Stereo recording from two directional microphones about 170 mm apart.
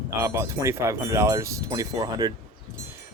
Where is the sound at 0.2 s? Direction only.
15° right (ahead or behind).